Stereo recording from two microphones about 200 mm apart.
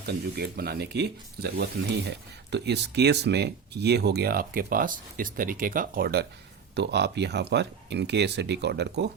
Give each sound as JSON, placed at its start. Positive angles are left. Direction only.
{"t": 0.0, "sound": "speech", "side_deg": -55}